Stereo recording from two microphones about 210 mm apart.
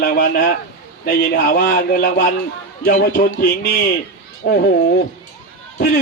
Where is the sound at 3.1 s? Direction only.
50° left (ahead or behind).